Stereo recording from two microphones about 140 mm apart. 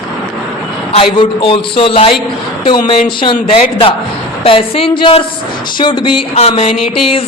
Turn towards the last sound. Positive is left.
turn(degrees=40)  # may be behind; listen again after turning